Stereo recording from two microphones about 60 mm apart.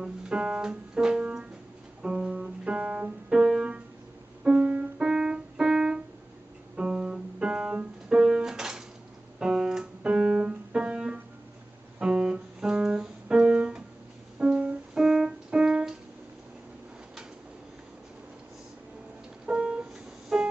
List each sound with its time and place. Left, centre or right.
0.0 s music: centre
4.4 s keyboard: centre
6.8 s piano: centre
9.4 s music: centre
15.0 s keyboard: centre
19.4 s music: centre